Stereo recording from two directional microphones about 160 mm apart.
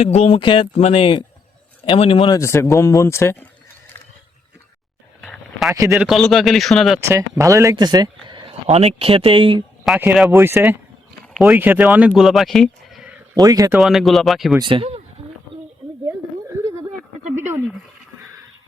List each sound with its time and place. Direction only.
0.0 s speech: 40° left (ahead or behind); by 3.5 s 15° left (ahead or behind)
5.2 s a sound: centre (ahead or behind)
5.9 s speech: centre (ahead or behind)
7.0 s speech: 20° right (ahead or behind)
8.6 s speech: 40° right (ahead or behind)
9.8 s speech: 5° right (ahead or behind)
13.4 s speech: 20° right (ahead or behind)
13.7 s speech: centre (ahead or behind)
14.6 s speech: 35° right (ahead or behind)
16.0 s a sound: 20° right (ahead or behind)